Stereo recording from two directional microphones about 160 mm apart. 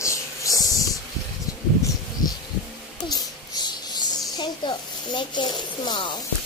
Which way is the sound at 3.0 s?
25° left (ahead or behind).